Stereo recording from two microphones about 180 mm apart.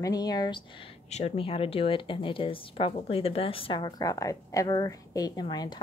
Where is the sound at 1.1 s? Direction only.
35° left (ahead or behind).